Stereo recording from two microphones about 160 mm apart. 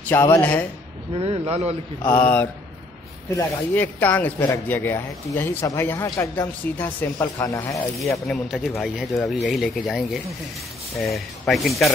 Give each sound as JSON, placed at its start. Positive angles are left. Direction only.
{"t": 0.0, "sound": "speech", "side_deg": 15}
{"t": 1.1, "sound": "speech", "side_deg": -35}
{"t": 2.0, "sound": "speech", "side_deg": 10}
{"t": 3.7, "sound": "speech", "side_deg": 10}
{"t": 8.0, "sound": "speech", "side_deg": 0}